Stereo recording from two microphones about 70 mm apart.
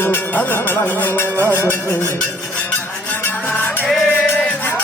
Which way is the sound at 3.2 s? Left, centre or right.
Left.